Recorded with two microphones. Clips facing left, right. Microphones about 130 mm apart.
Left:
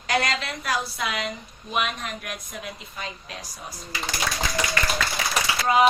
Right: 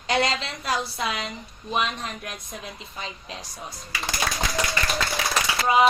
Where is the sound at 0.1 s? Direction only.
25° right (ahead or behind).